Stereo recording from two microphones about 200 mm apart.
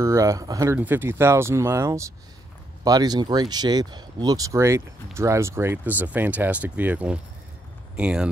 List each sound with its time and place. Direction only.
0.0 s speech: 15° right (ahead or behind)